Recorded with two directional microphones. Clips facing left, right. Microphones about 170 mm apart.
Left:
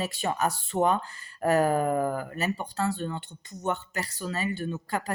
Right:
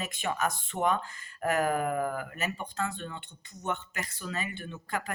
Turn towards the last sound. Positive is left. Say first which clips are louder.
# left 5 dB
turn(degrees=35)  # may be behind; listen again after turning